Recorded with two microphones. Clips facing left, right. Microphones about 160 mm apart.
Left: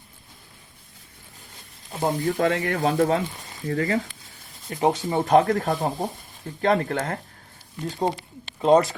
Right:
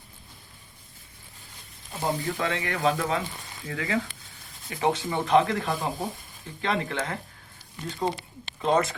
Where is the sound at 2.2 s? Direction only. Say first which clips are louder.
Left 7 dB; 45° left (ahead or behind).